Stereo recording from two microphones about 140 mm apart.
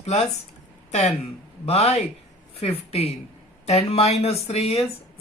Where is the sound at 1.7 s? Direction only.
45° left (ahead or behind).